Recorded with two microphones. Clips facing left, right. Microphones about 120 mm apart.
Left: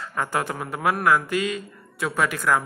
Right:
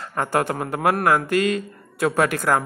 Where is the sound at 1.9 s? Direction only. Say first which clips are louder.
Right 5 dB; 45° right (ahead or behind).